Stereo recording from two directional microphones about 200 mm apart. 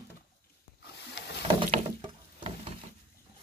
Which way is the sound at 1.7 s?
30° right (ahead or behind).